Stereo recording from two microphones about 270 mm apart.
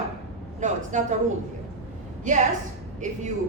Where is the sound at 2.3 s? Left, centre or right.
Right.